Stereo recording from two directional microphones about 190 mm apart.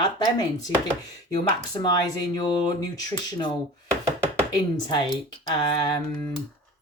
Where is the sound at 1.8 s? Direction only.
20° left (ahead or behind).